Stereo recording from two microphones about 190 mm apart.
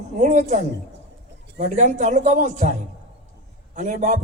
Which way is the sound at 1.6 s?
40° right (ahead or behind).